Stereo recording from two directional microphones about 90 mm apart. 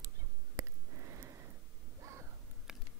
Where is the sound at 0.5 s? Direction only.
35° right (ahead or behind).